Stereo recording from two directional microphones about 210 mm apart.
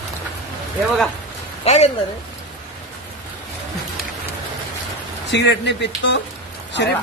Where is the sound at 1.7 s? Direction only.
30° left (ahead or behind).